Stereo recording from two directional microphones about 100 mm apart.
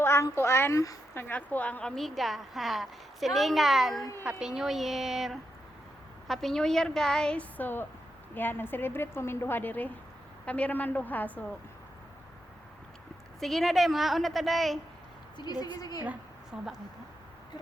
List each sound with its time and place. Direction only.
0.0 s a sound: 25° left (ahead or behind)
0.3 s a woman's voice: 25° left (ahead or behind)
13.4 s speech: centre (ahead or behind)
15.4 s a woman's voice: 45° left (ahead or behind)
16.0 s a woman's voice: 5° right (ahead or behind)